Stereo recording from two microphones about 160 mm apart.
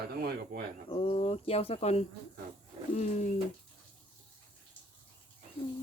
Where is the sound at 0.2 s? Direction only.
75° right (ahead or behind).